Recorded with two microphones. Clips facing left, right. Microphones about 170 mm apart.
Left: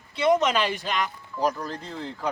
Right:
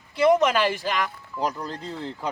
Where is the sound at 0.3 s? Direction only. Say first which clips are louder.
Right 2 dB; 5° right (ahead or behind).